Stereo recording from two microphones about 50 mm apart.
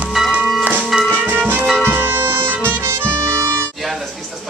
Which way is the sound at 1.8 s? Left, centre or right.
Right.